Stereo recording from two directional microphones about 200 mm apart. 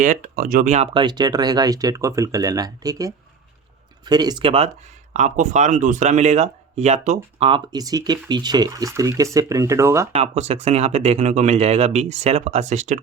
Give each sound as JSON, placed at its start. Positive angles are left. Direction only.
{"t": 0.0, "sound": "speech", "side_deg": -40}
{"t": 10.1, "sound": "speech", "side_deg": -30}